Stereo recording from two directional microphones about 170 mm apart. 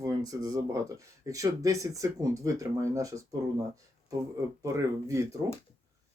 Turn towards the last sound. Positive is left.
turn(degrees=-20)  # may be behind; listen again after turning